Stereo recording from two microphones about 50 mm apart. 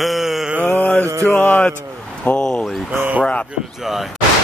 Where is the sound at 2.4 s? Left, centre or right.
Centre.